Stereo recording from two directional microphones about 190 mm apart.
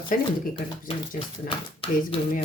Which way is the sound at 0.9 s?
25° left (ahead or behind).